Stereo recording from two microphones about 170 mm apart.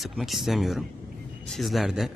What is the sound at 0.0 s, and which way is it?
A man's voice, centre (ahead or behind).